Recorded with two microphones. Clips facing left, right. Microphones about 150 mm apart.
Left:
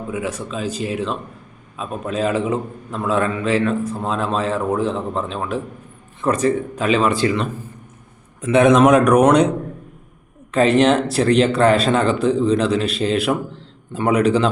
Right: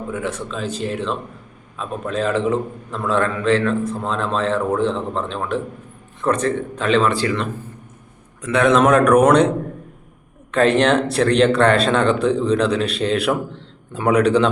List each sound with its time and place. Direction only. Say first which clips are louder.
0.1 s a man's voice: left 1 dB; 10° left (ahead or behind)
10.5 s speech: left 1 dB; 5° left (ahead or behind)